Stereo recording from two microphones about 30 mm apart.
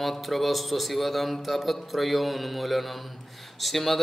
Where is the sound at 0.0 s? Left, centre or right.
Centre.